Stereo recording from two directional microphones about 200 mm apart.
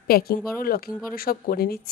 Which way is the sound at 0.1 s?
50° left (ahead or behind).